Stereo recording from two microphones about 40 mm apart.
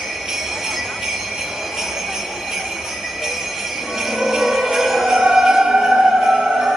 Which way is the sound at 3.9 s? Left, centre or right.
Centre.